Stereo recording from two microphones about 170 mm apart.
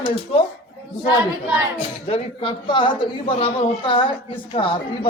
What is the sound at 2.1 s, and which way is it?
Speech, 30° left (ahead or behind).